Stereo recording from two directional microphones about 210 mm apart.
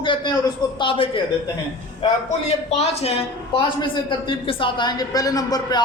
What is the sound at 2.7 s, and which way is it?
A woman's voice, 30° left (ahead or behind).